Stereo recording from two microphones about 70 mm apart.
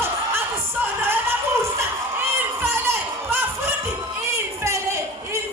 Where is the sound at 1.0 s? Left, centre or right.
Right.